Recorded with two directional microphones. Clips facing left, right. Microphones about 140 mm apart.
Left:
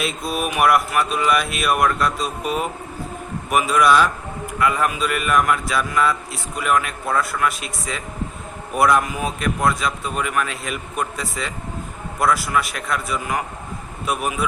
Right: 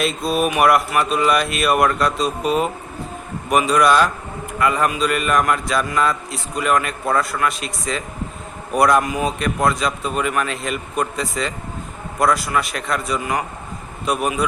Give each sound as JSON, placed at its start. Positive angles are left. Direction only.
{"t": 0.0, "sound": "a man's voice", "side_deg": 0}